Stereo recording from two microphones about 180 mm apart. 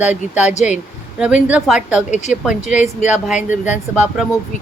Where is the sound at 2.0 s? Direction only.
40° left (ahead or behind).